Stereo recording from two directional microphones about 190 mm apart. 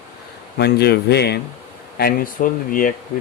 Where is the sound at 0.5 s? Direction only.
60° left (ahead or behind).